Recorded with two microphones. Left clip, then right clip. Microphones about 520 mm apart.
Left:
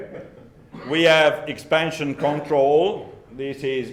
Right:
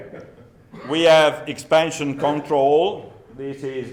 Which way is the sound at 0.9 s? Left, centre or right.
Centre.